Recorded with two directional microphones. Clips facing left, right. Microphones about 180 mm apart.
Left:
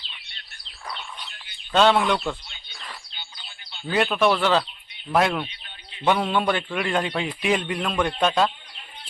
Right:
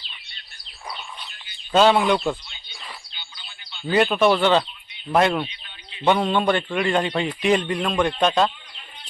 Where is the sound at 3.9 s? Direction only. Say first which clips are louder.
Right 3 dB; centre (ahead or behind).